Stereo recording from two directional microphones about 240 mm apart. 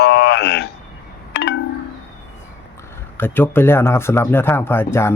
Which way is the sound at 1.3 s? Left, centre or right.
Left.